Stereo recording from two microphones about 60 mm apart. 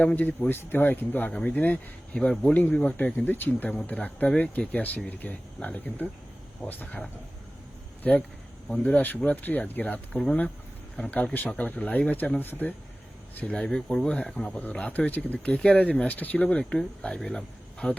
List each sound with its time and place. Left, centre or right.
0.2 s speech: left
1.3 s speech: left
2.1 s speech: centre
2.5 s speech: left
2.7 s speech: left
3.2 s speech: left
8.7 s speech: left
10.1 s speech: centre
10.9 s speech: left
13.3 s speech: left
13.7 s speech: centre